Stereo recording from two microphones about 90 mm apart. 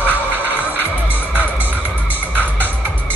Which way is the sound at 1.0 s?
20° right (ahead or behind).